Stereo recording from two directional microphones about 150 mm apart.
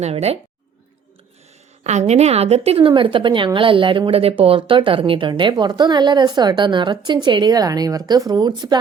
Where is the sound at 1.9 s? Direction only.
50° right (ahead or behind).